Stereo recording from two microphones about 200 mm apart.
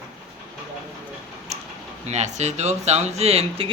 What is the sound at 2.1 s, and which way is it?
Speech, 35° right (ahead or behind).